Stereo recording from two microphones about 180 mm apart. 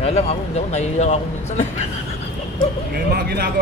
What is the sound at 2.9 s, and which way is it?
Speech, 60° right (ahead or behind).